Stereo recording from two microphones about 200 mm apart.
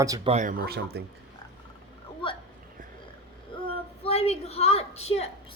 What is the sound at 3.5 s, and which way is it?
Child singing, 25° left (ahead or behind).